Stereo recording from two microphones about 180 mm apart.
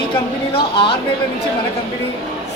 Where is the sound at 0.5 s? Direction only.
30° left (ahead or behind).